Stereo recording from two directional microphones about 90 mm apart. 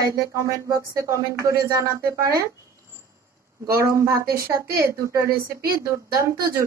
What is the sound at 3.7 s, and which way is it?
A woman's voice, 30° right (ahead or behind).